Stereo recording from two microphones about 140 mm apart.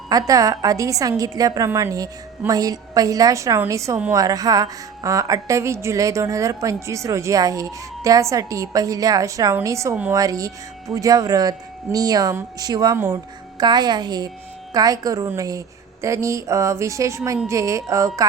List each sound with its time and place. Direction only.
0.1 s a woman's voice: 25° right (ahead or behind)